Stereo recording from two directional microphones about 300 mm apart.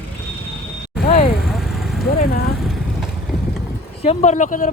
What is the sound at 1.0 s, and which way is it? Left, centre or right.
Speech, left.